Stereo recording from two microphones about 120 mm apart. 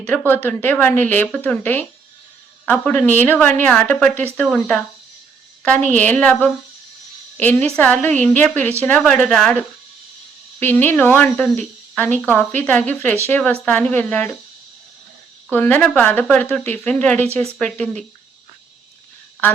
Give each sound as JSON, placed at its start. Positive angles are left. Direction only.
{"t": 0.3, "sound": "speech", "side_deg": 15}
{"t": 5.9, "sound": "speech", "side_deg": 15}
{"t": 7.3, "sound": "speech", "side_deg": 15}
{"t": 10.6, "sound": "speech", "side_deg": 15}
{"t": 15.4, "sound": "speech", "side_deg": 15}